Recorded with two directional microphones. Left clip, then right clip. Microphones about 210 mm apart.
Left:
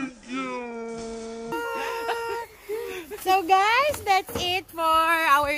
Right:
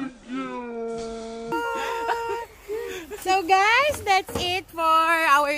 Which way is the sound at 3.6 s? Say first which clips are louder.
Right 2 dB; 10° left (ahead or behind).